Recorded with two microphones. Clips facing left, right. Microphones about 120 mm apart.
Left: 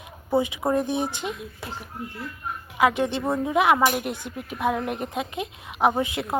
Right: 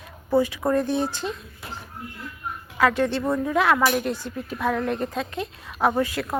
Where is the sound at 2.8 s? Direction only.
15° left (ahead or behind).